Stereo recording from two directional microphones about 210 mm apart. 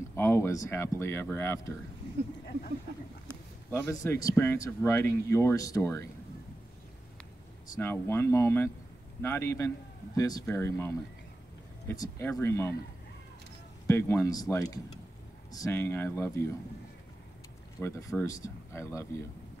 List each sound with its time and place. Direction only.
0.1 s speech: 10° left (ahead or behind)
3.7 s speech: 15° left (ahead or behind)
7.7 s speech: 10° left (ahead or behind)
13.8 s speech: 10° left (ahead or behind)
17.7 s speech: 15° left (ahead or behind)